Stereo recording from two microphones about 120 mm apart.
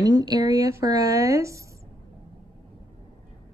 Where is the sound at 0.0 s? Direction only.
30° right (ahead or behind).